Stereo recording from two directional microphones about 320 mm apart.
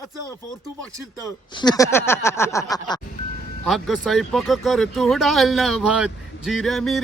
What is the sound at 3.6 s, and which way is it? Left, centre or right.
Speech, centre.